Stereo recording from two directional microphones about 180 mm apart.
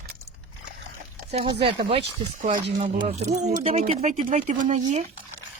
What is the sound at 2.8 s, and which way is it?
Speech, 35° right (ahead or behind).